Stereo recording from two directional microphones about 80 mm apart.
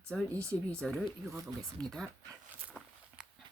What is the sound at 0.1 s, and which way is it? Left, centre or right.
Speech, centre.